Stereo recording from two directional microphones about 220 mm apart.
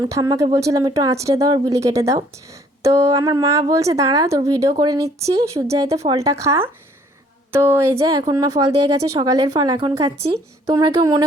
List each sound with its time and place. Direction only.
0.0 s a woman's voice: 20° right (ahead or behind)
7.9 s a woman's voice: 20° right (ahead or behind)